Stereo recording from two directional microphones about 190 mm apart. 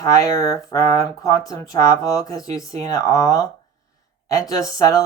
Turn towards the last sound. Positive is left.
turn(degrees=15)  # may be behind; listen again after turning